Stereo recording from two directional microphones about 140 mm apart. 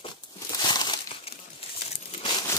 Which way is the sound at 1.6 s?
45° left (ahead or behind).